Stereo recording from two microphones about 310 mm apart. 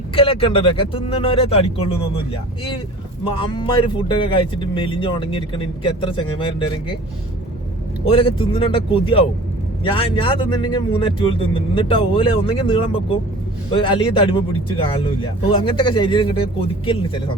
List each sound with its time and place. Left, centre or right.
0.1 s speech: centre
3.2 s speech: centre
8.0 s speech: centre